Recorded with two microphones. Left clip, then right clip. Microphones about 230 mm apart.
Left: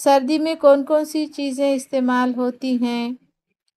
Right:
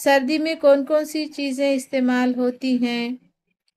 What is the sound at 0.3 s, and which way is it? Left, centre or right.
A woman's voice, centre.